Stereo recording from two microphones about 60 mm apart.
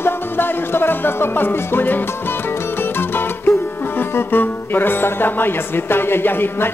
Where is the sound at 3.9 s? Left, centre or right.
Left.